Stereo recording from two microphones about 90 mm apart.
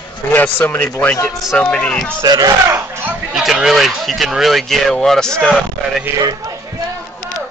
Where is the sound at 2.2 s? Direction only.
45° right (ahead or behind).